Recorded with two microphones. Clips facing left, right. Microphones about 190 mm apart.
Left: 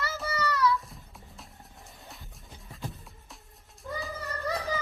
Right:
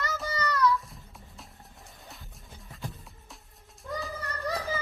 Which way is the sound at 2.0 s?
Centre (ahead or behind).